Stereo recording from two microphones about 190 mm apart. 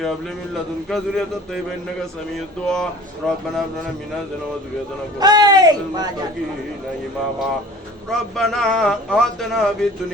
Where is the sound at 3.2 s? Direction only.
Centre (ahead or behind).